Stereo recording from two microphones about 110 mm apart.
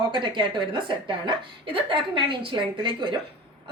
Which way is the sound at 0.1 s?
45° right (ahead or behind).